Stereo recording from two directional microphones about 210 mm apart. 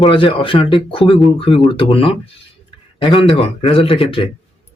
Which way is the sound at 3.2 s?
25° left (ahead or behind).